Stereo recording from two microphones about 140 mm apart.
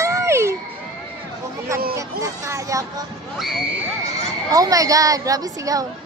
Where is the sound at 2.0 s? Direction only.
20° right (ahead or behind).